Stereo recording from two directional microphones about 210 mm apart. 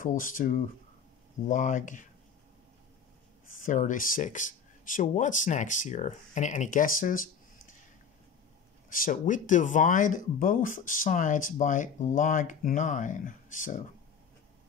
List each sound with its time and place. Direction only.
0.0 s speech: 40° left (ahead or behind)
3.5 s speech: 40° left (ahead or behind)
8.9 s speech: 40° left (ahead or behind)